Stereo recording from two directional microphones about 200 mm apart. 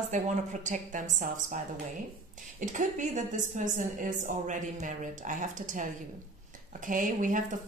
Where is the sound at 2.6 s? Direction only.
40° right (ahead or behind).